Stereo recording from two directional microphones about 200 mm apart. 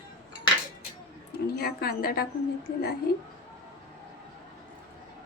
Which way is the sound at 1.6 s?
50° left (ahead or behind).